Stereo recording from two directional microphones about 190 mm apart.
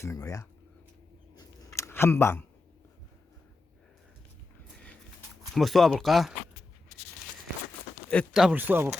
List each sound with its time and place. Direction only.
0.0 s speech: 15° left (ahead or behind)
1.4 s chewing: 15° left (ahead or behind)
5.5 s speech: centre (ahead or behind)
8.1 s speech: centre (ahead or behind)